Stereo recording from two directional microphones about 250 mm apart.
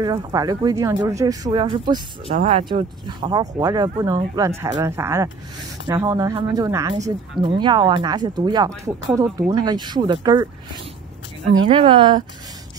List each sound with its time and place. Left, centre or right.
0.0 s speech: centre
11.6 s speech: centre